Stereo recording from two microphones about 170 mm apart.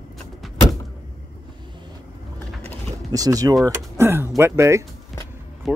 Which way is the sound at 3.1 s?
20° right (ahead or behind).